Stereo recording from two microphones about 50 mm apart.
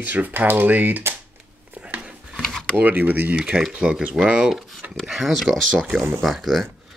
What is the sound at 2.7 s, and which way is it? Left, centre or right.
Speech, right.